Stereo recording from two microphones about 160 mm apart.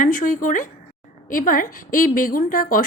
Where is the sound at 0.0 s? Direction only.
60° left (ahead or behind).